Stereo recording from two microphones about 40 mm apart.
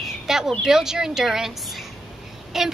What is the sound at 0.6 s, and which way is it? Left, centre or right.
Speech, centre.